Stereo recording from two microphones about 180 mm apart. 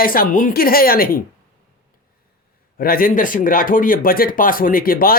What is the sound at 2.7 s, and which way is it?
Speech, 55° left (ahead or behind).